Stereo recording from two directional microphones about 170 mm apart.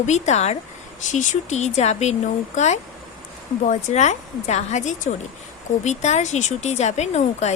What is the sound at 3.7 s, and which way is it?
A woman's voice, 45° left (ahead or behind).